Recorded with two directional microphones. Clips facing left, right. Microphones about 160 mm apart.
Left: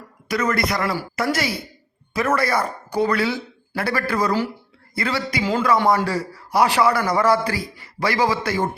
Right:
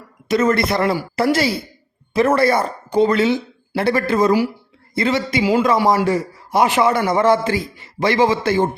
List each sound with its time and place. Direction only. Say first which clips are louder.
0.3 s a man's voice: right 5 dB; 25° right (ahead or behind)
5.4 s a man's voice: right 3 dB; 10° right (ahead or behind)